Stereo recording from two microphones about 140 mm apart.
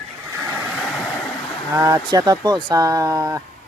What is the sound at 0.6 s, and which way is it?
Vehicle, centre (ahead or behind).